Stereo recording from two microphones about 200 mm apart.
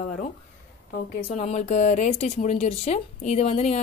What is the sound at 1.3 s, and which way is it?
Speech, 35° left (ahead or behind).